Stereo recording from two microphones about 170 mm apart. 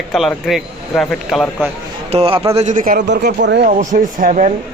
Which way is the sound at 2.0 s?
35° right (ahead or behind).